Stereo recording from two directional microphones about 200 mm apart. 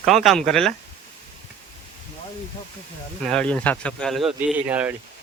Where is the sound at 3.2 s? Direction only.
5° left (ahead or behind).